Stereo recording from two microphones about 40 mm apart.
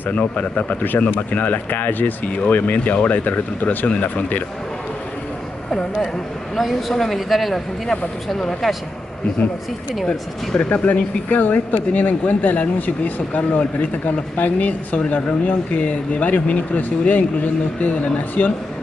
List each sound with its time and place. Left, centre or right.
0.1 s speech: left
6.9 s speech: centre
10.0 s speech: left
10.9 s speech: left